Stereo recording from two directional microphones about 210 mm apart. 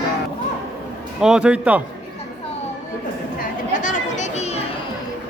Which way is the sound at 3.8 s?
35° left (ahead or behind).